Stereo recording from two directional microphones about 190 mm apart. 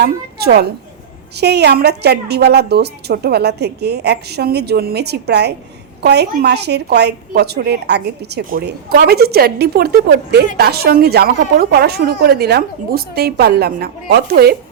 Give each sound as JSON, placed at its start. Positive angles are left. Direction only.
{"t": 0.0, "sound": "a woman's voice", "side_deg": -55}